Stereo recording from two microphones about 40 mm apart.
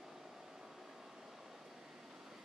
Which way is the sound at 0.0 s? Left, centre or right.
Centre.